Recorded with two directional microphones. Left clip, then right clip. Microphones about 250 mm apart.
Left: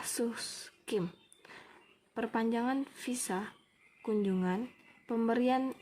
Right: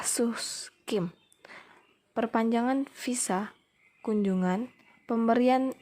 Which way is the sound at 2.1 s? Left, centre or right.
Right.